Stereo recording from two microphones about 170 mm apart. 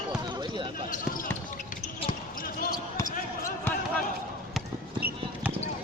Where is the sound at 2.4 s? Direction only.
55° left (ahead or behind).